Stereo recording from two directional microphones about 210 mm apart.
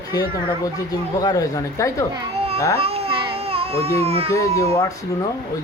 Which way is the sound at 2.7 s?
30° right (ahead or behind).